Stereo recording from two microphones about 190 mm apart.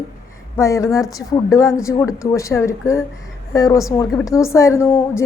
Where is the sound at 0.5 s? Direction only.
15° left (ahead or behind).